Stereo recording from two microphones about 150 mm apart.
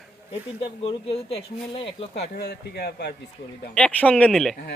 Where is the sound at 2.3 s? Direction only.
90° left.